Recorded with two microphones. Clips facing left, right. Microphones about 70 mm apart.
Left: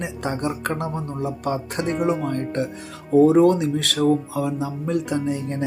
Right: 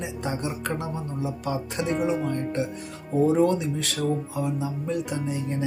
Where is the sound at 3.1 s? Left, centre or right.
Left.